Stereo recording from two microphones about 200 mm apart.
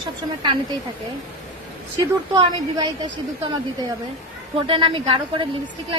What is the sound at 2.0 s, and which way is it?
A woman's voice, 20° right (ahead or behind).